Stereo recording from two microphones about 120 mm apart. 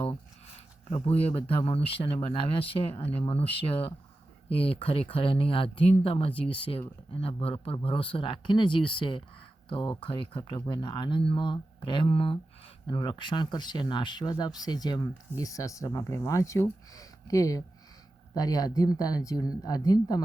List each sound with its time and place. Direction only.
1.0 s speech: 55° left (ahead or behind); by 20.2 s 30° left (ahead or behind)